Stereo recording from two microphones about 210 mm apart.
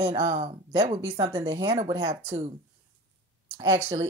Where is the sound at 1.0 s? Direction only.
15° right (ahead or behind).